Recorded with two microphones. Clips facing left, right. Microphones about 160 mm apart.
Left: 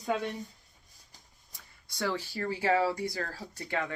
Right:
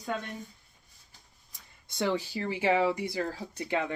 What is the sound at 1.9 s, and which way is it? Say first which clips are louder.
Speech: right 4 dB; 20° right (ahead or behind).